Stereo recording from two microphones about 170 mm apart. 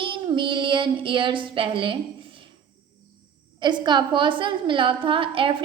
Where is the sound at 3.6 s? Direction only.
25° right (ahead or behind).